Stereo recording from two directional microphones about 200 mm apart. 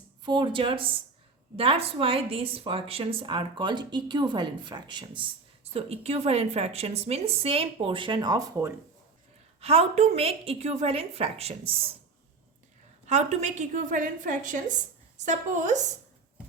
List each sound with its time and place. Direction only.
0.3 s a woman's voice: 20° right (ahead or behind)
9.6 s a woman's voice: 30° right (ahead or behind)
13.1 s a woman's voice: 35° right (ahead or behind)